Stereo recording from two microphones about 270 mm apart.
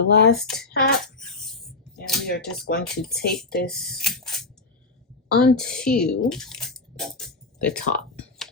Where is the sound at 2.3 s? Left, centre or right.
Left.